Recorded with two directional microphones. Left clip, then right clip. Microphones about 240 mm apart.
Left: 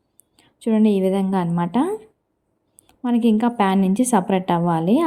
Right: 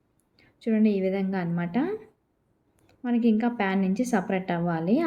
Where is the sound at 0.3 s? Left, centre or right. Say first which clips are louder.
Left 6 dB; left.